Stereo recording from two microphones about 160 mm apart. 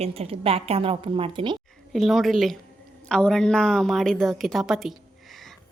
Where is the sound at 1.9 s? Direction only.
Centre (ahead or behind).